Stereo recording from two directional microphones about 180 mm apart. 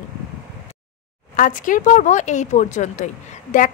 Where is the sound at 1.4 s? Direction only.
45° left (ahead or behind).